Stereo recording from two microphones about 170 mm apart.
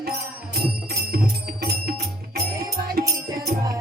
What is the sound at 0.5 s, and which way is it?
Music, 60° right (ahead or behind).